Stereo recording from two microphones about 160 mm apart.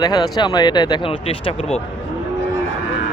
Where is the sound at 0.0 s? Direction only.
25° left (ahead or behind).